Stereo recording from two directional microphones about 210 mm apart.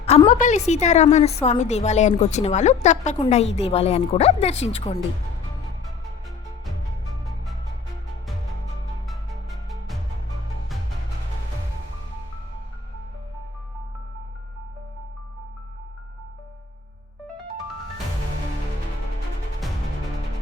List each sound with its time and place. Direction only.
0.0 s a woman's voice: 30° left (ahead or behind)
9.6 s music: centre (ahead or behind)